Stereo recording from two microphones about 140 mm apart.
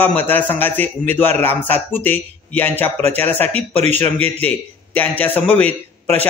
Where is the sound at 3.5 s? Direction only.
50° right (ahead or behind).